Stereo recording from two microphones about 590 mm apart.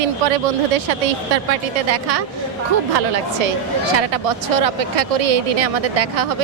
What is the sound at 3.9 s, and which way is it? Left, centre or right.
Speech, right.